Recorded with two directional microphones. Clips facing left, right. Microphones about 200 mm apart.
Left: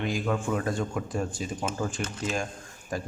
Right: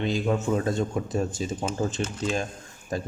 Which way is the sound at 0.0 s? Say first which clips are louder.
Right 3 dB; 25° right (ahead or behind).